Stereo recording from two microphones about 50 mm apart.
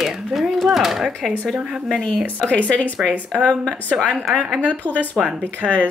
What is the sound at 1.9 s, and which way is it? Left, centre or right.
Speech, centre.